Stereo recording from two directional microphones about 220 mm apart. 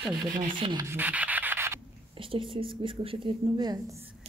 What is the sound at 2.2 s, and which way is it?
A woman's voice, 25° right (ahead or behind).